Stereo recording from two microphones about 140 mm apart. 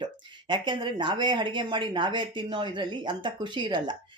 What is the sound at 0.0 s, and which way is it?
Speech, 35° right (ahead or behind).